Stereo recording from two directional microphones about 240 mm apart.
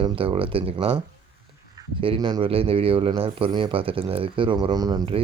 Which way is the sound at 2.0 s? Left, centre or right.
Centre.